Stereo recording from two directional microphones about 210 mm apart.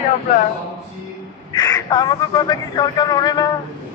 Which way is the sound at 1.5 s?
20° left (ahead or behind).